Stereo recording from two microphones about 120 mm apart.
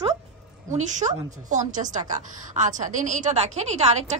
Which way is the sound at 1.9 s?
90° right.